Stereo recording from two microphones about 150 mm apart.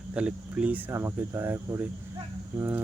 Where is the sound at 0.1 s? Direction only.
5° right (ahead or behind).